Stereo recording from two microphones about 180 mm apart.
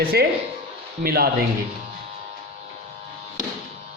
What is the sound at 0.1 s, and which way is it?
Speech, 60° right (ahead or behind).